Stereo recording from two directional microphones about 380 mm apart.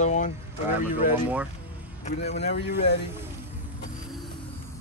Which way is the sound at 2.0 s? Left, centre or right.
Centre.